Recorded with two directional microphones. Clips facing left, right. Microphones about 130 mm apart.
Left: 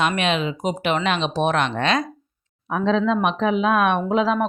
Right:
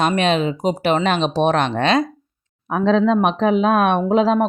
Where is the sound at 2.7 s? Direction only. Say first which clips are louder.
Right 4 dB; 45° right (ahead or behind); by 4.4 s 30° right (ahead or behind).